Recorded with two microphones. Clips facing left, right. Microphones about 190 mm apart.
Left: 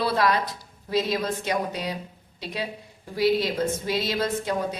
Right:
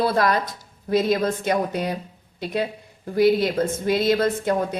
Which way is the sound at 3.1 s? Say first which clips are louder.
Right 5 dB; 55° right (ahead or behind).